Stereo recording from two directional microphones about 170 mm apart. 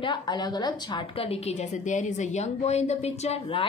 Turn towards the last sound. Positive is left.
turn(degrees=40)  # may be behind; listen again after turning